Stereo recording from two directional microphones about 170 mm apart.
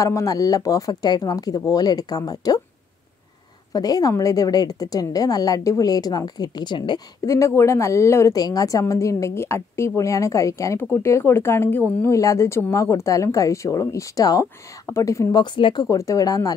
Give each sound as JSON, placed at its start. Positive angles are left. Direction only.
{"t": 0.0, "sound": "a woman's voice", "side_deg": 20}
{"t": 3.7, "sound": "a woman's voice", "side_deg": 20}